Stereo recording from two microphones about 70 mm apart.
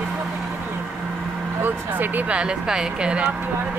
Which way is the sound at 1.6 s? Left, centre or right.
Right.